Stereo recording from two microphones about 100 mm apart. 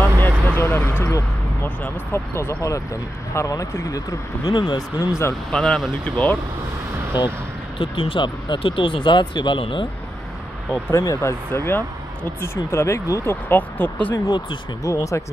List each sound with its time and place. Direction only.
0.0 s speech: 20° left (ahead or behind); by 4.6 s 35° left (ahead or behind)
4.6 s speech: 45° left (ahead or behind)
5.5 s speech: 10° left (ahead or behind)
7.2 s speech: 45° left (ahead or behind)
7.8 s speech: 60° left (ahead or behind)
10.7 s speech: 30° left (ahead or behind)
14.1 s speech: 35° left (ahead or behind)